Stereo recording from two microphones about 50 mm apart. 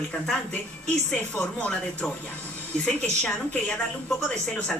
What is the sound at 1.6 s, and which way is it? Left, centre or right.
Speech, left.